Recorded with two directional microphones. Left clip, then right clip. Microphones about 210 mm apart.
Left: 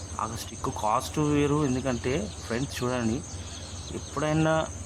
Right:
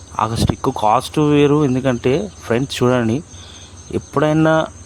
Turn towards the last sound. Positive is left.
turn(degrees=-35)  # may be behind; listen again after turning